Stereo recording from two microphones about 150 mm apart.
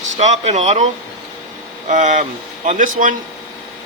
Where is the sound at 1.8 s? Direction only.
55° right (ahead or behind).